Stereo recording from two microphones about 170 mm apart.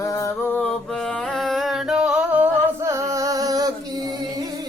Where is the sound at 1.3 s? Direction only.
Centre (ahead or behind); by 3.7 s 20° right (ahead or behind).